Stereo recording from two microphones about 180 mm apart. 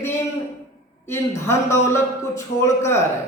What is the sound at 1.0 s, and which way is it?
A man's voice, 15° left (ahead or behind).